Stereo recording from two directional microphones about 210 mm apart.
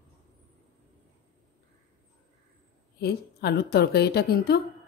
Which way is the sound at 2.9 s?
50° left (ahead or behind).